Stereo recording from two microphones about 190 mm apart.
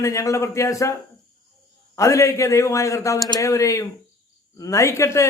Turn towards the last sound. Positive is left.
turn(degrees=15)  # may be behind; listen again after turning